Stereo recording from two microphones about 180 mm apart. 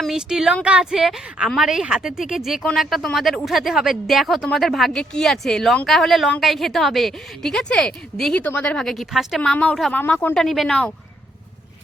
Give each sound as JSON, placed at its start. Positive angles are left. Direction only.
{"t": 0.0, "sound": "a woman's voice", "side_deg": -5}